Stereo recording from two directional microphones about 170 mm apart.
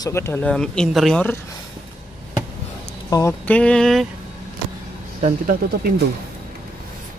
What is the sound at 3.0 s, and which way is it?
Speech, 20° left (ahead or behind).